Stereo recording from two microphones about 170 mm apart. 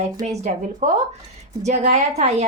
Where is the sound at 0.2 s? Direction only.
40° right (ahead or behind).